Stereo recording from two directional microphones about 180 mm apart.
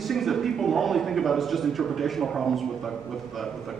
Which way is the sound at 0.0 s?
Centre (ahead or behind).